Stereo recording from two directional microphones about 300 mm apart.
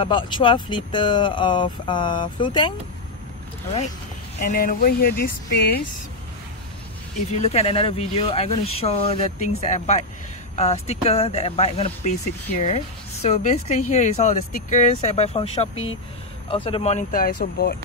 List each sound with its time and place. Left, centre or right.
0.0 s speech: centre
4.4 s speech: left
7.4 s speech: centre